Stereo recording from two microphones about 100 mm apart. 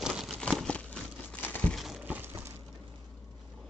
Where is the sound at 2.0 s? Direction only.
20° right (ahead or behind).